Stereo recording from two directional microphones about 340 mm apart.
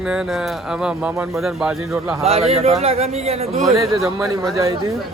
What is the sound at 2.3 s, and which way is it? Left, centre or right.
A man's voice, centre.